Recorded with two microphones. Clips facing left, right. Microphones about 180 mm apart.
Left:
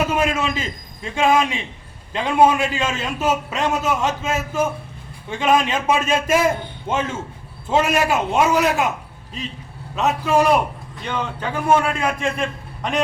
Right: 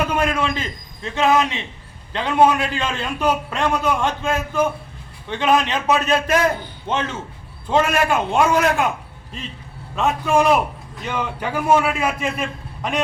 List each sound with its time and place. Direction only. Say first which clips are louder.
0.0 s a man's voice: even; 5° left (ahead or behind)